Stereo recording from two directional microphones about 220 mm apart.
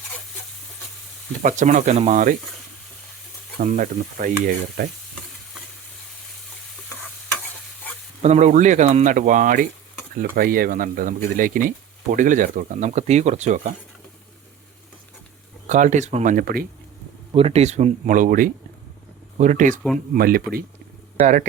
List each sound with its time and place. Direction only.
1.4 s speech: 35° right (ahead or behind)
3.6 s speech: 35° right (ahead or behind)
8.2 s speech: 30° right (ahead or behind)
15.6 s speech: 35° right (ahead or behind)
17.3 s speech: 25° right (ahead or behind)